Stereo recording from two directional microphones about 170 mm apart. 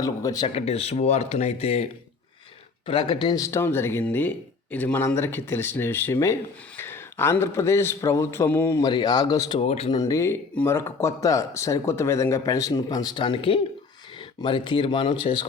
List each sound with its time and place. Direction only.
0.0 s speech: 20° left (ahead or behind)
0.5 s a man's voice: 40° left (ahead or behind); by 9.6 s 20° left (ahead or behind)
9.6 s speech: 35° left (ahead or behind)
9.9 s speech: 20° left (ahead or behind)